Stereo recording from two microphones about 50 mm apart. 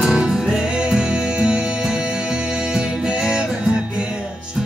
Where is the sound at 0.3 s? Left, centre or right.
Centre.